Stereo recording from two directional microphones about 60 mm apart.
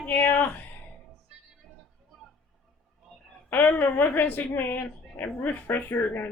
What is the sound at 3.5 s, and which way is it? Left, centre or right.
Speech, left.